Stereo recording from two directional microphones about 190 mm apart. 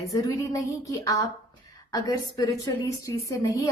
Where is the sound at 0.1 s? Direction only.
20° left (ahead or behind).